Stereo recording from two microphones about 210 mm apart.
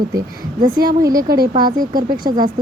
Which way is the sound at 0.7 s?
15° right (ahead or behind).